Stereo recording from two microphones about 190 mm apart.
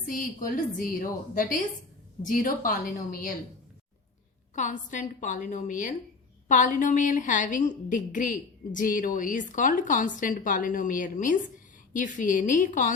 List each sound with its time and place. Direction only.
0.1 s a woman's voice: 45° left (ahead or behind)
4.5 s a woman's voice: 40° left (ahead or behind)